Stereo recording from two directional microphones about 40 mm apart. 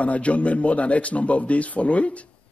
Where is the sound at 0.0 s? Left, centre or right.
Left.